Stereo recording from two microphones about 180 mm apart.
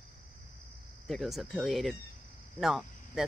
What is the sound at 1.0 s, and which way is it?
Speech, centre (ahead or behind).